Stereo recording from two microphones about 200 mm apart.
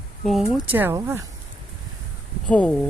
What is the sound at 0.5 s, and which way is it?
Speech, 10° right (ahead or behind).